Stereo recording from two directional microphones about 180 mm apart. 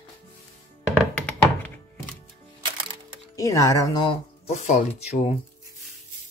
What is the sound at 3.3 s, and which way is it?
Speech, 20° left (ahead or behind).